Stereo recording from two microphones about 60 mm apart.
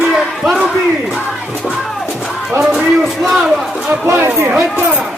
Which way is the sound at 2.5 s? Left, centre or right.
Centre.